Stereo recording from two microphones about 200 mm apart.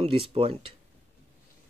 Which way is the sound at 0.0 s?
25° right (ahead or behind).